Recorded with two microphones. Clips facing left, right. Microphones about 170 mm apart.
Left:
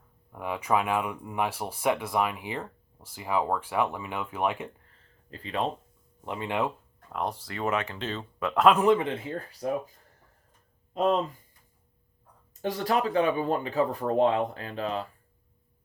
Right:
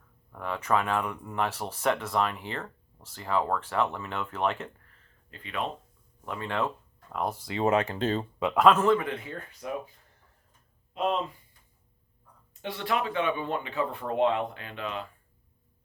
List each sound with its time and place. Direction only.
0.3 s speech: 10° left (ahead or behind)
5.3 s speech: 35° left (ahead or behind)
6.2 s speech: 20° left (ahead or behind)
7.1 s speech: 5° right (ahead or behind)
7.4 s speech: 25° right (ahead or behind); by 8.3 s 40° right (ahead or behind)
8.5 s speech: 5° left (ahead or behind)
8.8 s speech: 20° left (ahead or behind); by 9.9 s 35° left (ahead or behind)
10.9 s speech: 40° left (ahead or behind)
12.6 s speech: 40° left (ahead or behind)